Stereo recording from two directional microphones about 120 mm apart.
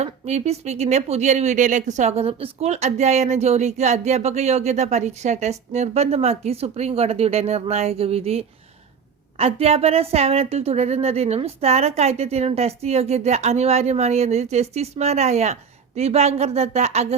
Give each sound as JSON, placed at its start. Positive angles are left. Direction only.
{"t": 0.0, "sound": "speech", "side_deg": -65}